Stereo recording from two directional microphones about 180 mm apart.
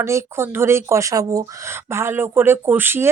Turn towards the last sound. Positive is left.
turn(degrees=-10)  # may be behind; listen again after turning